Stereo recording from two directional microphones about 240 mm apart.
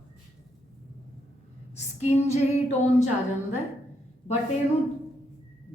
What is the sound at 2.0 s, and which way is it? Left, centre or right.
Speech, left.